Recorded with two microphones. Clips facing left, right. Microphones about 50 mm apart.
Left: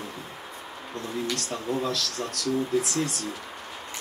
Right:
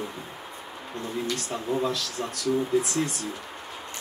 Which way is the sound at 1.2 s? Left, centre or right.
Centre.